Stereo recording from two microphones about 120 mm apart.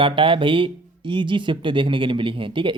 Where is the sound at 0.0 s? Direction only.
45° right (ahead or behind).